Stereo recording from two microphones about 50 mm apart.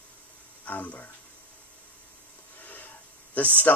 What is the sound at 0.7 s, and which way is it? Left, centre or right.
Speech, left.